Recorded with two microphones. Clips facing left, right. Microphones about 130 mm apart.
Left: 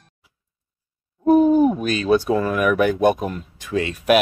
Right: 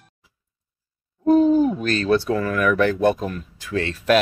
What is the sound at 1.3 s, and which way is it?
Hoot, 15° left (ahead or behind).